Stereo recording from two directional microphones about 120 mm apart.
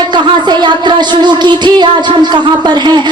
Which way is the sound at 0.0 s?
40° right (ahead or behind).